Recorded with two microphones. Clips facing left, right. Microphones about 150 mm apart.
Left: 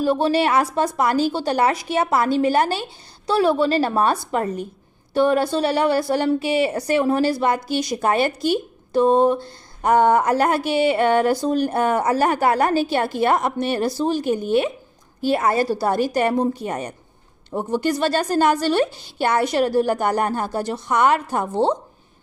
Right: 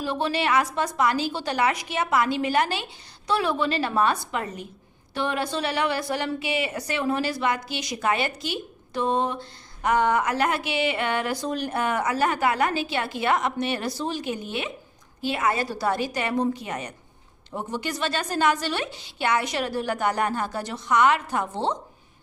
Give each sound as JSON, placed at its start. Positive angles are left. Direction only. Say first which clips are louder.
{"t": 0.0, "sound": "a woman's voice", "louder": "left 7 dB", "side_deg": 35}